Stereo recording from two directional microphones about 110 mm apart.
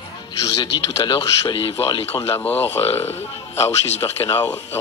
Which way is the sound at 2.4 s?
15° left (ahead or behind).